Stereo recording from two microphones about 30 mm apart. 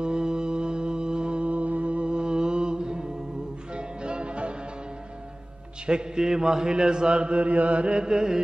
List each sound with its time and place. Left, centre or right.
0.0 s music: right
1.5 s music: right
5.9 s chant: right
8.0 s carnatic music: right